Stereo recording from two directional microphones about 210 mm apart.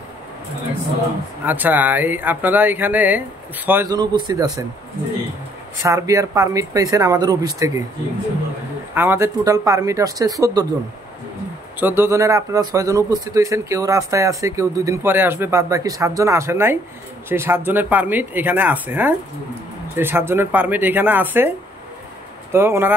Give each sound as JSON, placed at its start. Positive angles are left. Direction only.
{"t": 1.4, "sound": "speech", "side_deg": -10}
{"t": 5.8, "sound": "speech", "side_deg": -15}
{"t": 8.9, "sound": "speech", "side_deg": -10}
{"t": 11.8, "sound": "speech", "side_deg": -10}
{"t": 22.5, "sound": "speech", "side_deg": -10}